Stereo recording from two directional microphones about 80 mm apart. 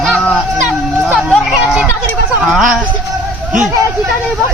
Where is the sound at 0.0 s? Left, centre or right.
Centre.